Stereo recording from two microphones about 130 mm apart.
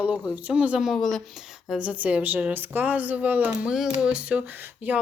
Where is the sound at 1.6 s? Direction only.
10° right (ahead or behind).